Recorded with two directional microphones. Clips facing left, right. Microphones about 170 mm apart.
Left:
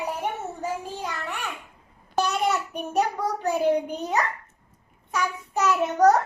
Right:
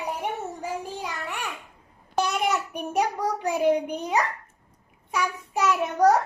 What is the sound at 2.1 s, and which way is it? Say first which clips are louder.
Child singing: left 1 dB; 15° right (ahead or behind).